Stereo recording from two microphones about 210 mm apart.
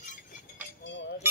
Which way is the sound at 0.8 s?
55° left (ahead or behind).